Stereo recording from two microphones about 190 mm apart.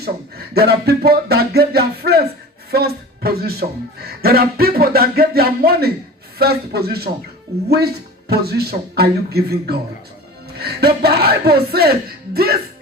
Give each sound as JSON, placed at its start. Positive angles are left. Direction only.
{"t": 0.0, "sound": "a man's voice", "side_deg": -55}